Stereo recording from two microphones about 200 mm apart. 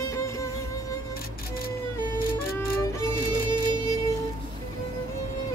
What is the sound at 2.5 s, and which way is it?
Music, 10° left (ahead or behind).